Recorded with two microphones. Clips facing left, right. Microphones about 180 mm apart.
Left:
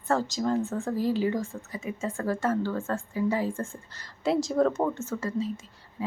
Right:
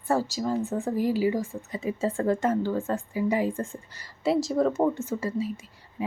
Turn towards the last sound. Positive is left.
turn(degrees=-15)  # may be behind; listen again after turning